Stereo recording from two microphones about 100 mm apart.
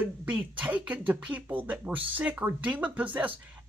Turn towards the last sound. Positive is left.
turn(degrees=-15)  # may be behind; listen again after turning